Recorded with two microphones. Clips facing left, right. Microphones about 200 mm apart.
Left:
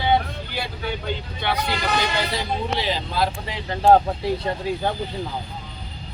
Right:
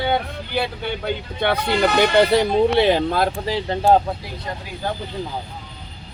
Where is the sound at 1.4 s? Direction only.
55° right (ahead or behind).